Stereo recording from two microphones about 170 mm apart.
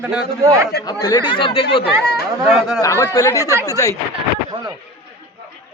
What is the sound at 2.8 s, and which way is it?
Speech, 20° left (ahead or behind).